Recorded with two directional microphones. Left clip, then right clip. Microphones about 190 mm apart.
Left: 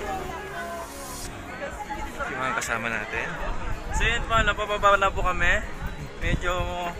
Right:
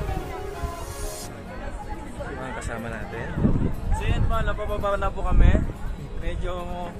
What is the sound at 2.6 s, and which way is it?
Speech, 30° right (ahead or behind).